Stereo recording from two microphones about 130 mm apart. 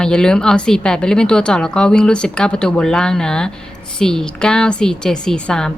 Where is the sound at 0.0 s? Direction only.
5° left (ahead or behind).